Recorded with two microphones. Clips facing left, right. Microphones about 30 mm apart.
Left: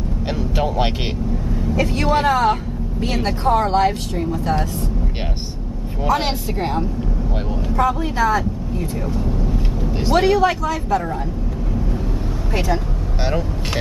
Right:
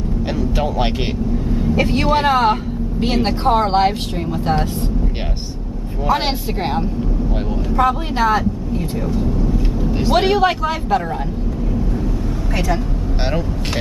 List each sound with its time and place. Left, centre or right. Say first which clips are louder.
0.6 s speech: left 1 dB; centre
1.5 s vehicle: right 3 dB; right
2.0 s speech: right 1 dB; right
6.0 s speech: right 1 dB; right
9.8 s vehicle: right 3 dB; centre
10.1 s speech: even; right